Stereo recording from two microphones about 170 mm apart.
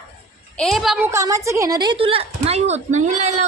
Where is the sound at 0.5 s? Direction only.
Centre (ahead or behind).